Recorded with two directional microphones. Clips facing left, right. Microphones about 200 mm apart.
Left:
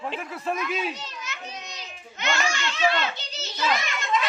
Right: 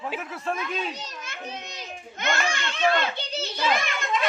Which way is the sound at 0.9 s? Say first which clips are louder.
Even; 45° right (ahead or behind).